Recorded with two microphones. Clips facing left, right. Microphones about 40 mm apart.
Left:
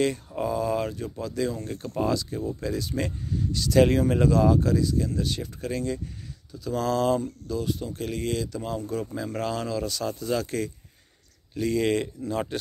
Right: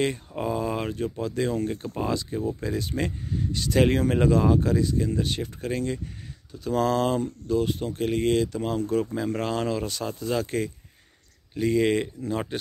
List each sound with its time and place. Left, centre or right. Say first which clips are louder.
0.4 s a sound: left 2 dB; right
1.1 s speech: right 2 dB; right
9.4 s speech: left 2 dB; right